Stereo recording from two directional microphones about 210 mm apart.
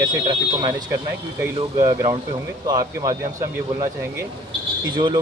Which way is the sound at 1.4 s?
15° right (ahead or behind).